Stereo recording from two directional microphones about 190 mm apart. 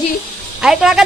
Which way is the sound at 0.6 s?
Centre (ahead or behind).